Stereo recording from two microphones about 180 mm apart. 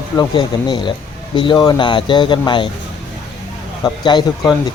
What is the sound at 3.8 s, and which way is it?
Speech, 25° left (ahead or behind).